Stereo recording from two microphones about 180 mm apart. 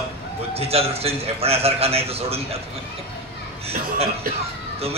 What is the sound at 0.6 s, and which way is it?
A man's voice, 35° right (ahead or behind).